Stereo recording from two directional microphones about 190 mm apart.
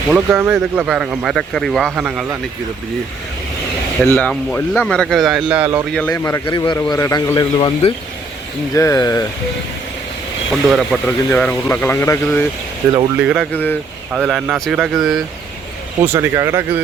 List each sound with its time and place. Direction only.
0.1 s speech: 10° right (ahead or behind)
4.2 s speech: 10° left (ahead or behind); by 5.8 s 10° right (ahead or behind)
5.9 s speech: 5° left (ahead or behind)
6.2 s a man's voice: 20° left (ahead or behind)
10.5 s speech: centre (ahead or behind)
13.1 s speech: 5° right (ahead or behind)
13.5 s speech: 10° left (ahead or behind)
14.1 s speech: centre (ahead or behind)
16.0 s speech: 15° right (ahead or behind)